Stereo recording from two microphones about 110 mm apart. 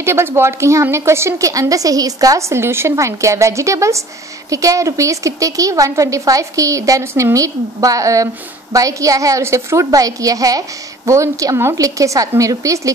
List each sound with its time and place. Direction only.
0.0 s a woman's voice: 25° right (ahead or behind)